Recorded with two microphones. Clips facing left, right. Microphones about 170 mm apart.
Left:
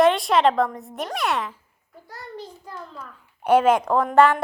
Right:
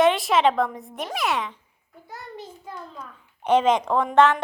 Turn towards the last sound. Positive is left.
turn(degrees=10)  # may be behind; listen again after turning